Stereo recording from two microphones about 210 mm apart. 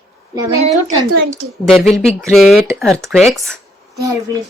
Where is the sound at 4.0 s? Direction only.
15° right (ahead or behind).